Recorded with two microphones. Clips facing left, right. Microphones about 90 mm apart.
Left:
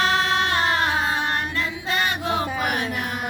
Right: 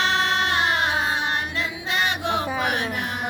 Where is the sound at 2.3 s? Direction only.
45° left (ahead or behind).